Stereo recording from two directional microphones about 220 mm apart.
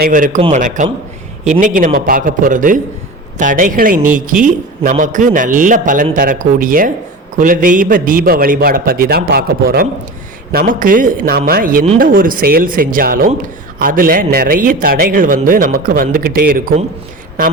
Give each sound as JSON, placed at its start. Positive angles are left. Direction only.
{"t": 0.0, "sound": "a man's voice", "side_deg": -40}